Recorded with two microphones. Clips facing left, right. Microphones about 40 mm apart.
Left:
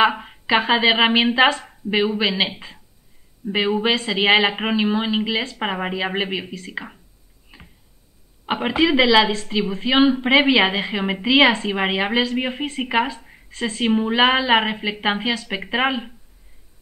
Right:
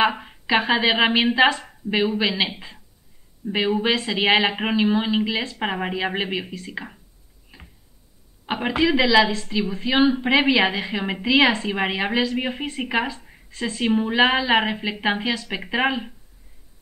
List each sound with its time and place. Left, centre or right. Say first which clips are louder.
0.2 s a woman's voice: left 2 dB; centre
8.5 s a woman's voice: left 2 dB; centre